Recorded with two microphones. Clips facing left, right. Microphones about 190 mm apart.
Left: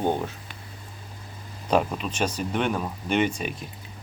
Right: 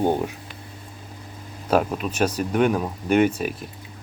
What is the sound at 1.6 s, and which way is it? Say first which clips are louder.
Speech: right 2 dB; 5° right (ahead or behind).